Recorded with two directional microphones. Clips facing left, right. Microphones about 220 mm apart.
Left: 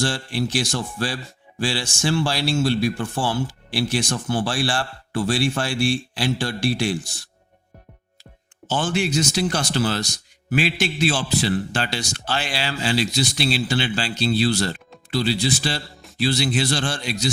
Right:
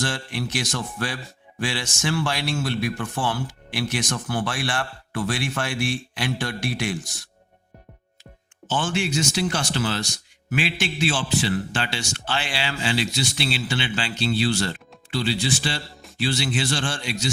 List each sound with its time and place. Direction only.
0.0 s speech: 30° left (ahead or behind)